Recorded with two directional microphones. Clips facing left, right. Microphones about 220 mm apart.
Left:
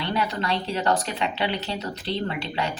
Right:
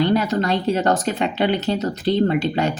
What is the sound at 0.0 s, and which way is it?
Speech, 45° right (ahead or behind).